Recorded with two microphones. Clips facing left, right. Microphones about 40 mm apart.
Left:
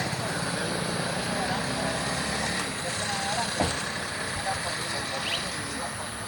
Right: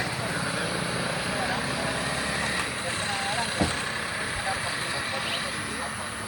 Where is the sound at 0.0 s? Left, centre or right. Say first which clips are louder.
Right 1 dB; centre.